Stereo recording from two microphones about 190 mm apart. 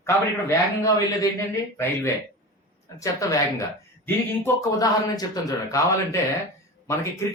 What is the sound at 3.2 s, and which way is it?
Speech, 15° left (ahead or behind).